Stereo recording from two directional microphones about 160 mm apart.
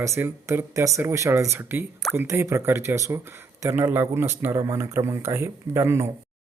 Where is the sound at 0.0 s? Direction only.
20° right (ahead or behind).